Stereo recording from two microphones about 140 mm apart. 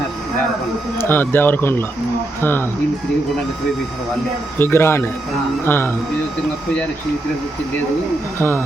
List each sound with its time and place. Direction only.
0.9 s speech: 15° left (ahead or behind)
4.5 s speech: 15° left (ahead or behind)
8.4 s speech: 15° left (ahead or behind)